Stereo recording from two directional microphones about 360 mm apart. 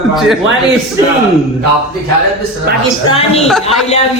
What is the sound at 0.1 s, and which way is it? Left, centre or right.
Speech, centre.